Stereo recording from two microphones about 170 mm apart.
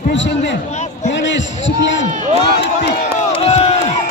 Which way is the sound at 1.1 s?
90° left.